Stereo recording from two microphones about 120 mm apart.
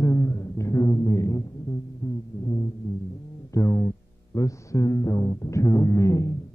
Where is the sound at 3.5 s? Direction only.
25° left (ahead or behind).